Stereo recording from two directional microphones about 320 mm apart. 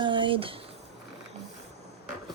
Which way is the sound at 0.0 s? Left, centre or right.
Centre.